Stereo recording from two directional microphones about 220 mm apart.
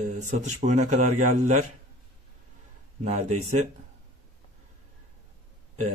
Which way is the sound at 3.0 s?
30° right (ahead or behind).